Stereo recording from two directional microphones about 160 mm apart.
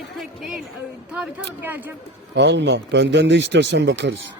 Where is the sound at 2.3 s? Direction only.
90° right.